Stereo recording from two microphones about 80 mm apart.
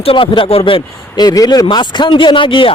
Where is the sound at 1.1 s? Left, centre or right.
Left.